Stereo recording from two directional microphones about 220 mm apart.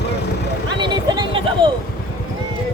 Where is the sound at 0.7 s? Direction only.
20° right (ahead or behind).